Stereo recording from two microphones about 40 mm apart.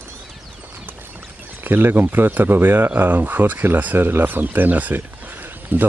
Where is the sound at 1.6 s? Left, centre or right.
Right.